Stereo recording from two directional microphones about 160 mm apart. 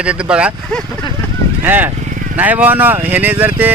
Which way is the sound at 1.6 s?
10° right (ahead or behind).